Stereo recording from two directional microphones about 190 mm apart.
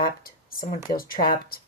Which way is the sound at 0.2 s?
50° left (ahead or behind).